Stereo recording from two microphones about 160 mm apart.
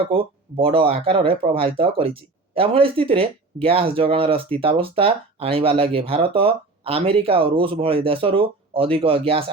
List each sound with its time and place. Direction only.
0.0 s speech: 35° right (ahead or behind)